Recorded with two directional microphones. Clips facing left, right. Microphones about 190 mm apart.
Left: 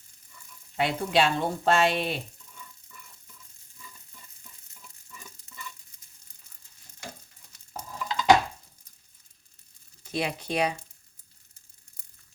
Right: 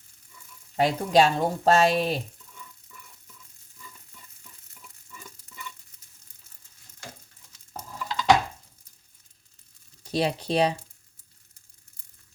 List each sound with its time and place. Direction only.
0.8 s speech: 40° right (ahead or behind)
7.7 s stir: centre (ahead or behind)
10.0 s speech: 35° right (ahead or behind)